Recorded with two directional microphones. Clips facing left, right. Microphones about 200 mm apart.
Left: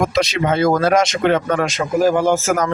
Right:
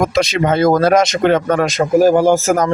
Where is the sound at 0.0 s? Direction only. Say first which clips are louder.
Right 3 dB; 40° right (ahead or behind).